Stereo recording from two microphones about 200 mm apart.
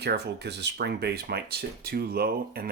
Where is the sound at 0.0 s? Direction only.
55° right (ahead or behind).